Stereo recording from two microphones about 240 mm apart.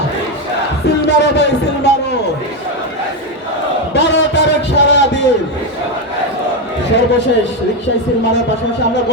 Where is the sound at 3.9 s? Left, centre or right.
Left.